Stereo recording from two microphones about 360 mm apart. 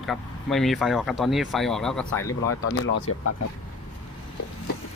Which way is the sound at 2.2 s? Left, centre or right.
Left.